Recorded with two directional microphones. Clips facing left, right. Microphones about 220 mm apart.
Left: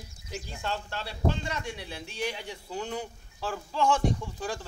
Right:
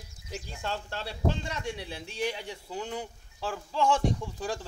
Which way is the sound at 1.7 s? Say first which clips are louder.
Right 1 dB; 25° right (ahead or behind).